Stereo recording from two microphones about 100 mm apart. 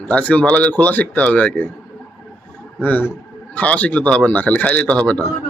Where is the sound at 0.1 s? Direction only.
15° left (ahead or behind).